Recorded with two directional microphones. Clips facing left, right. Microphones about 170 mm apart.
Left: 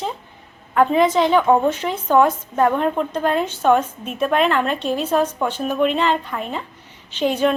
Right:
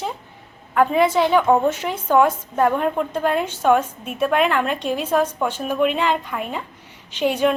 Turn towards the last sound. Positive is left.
turn(degrees=-10)  # may be behind; listen again after turning